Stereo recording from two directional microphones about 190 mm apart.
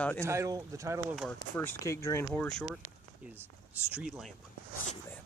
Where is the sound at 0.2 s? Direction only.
15° right (ahead or behind).